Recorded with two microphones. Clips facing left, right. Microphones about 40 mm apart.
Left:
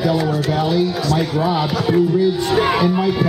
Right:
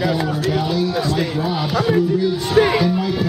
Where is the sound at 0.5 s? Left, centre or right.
Centre.